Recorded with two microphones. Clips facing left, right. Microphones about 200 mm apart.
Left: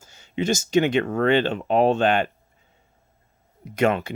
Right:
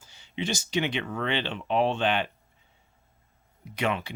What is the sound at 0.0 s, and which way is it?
Speech, 45° left (ahead or behind).